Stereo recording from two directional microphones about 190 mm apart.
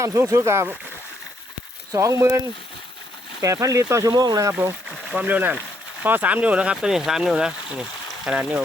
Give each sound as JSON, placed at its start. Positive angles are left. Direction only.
{"t": 0.0, "sound": "speech", "side_deg": -15}
{"t": 1.9, "sound": "speech", "side_deg": -15}
{"t": 3.4, "sound": "speech", "side_deg": -15}